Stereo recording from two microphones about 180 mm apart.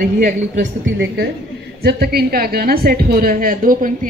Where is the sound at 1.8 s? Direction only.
60° right (ahead or behind).